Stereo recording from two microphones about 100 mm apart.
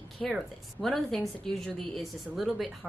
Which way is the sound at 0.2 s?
Centre (ahead or behind).